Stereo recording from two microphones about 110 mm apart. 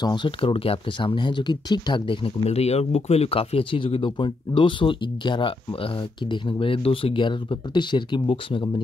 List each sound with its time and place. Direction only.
0.0 s speech: 45° left (ahead or behind)
2.4 s speech: 75° left (ahead or behind); by 8.8 s 50° left (ahead or behind)